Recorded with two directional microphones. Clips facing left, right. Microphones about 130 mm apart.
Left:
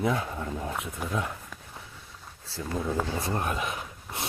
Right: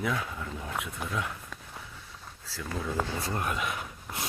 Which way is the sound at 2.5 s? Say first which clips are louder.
Left 4 dB; 25° left (ahead or behind).